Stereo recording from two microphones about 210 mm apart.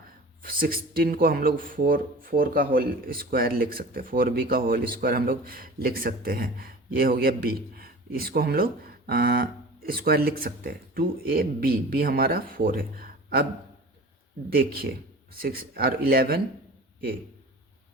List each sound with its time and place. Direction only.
0.4 s speech: 45° right (ahead or behind)
14.5 s speech: 45° right (ahead or behind)